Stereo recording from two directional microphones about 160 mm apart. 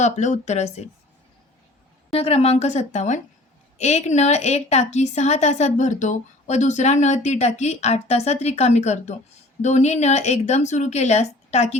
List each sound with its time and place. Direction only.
0.0 s a woman's voice: 45° left (ahead or behind)
2.1 s a woman's voice: 40° left (ahead or behind)